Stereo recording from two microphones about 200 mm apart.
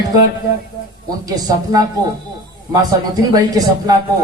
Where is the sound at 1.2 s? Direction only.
20° right (ahead or behind).